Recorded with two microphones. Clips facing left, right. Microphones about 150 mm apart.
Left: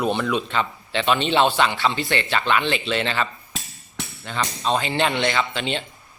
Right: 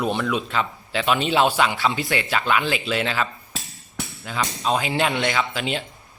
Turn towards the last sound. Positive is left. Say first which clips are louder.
# even
turn(degrees=-5)  # may be behind; listen again after turning